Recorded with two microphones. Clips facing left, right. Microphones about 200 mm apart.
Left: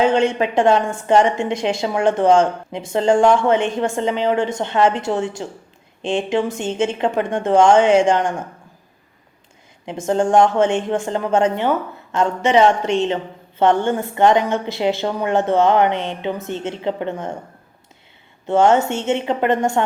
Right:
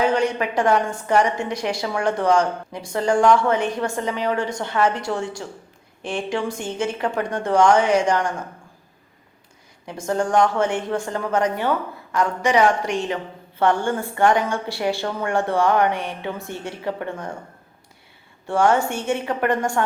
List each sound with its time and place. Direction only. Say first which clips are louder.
0.0 s a woman's voice: left 4 dB; 25° left (ahead or behind)
9.8 s a woman's voice: left 5 dB; 20° left (ahead or behind)
18.4 s a woman's voice: left 4 dB; 20° left (ahead or behind)